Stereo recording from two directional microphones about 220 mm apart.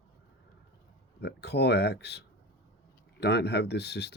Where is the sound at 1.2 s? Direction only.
50° left (ahead or behind).